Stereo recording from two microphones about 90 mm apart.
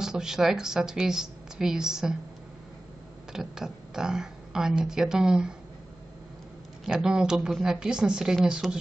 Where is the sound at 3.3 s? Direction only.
5° right (ahead or behind).